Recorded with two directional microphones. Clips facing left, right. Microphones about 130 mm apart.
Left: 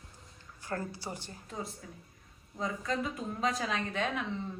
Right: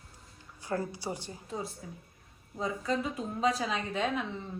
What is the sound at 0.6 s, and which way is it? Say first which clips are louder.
Speech: right 4 dB; 15° right (ahead or behind).